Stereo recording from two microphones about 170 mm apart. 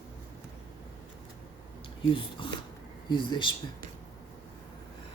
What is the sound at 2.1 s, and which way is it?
A woman's voice, 30° left (ahead or behind).